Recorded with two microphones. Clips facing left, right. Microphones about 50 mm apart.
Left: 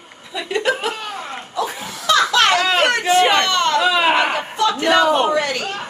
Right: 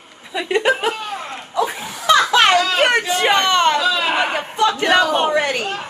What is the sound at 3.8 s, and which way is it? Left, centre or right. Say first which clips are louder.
Speech: left 3 dB; left.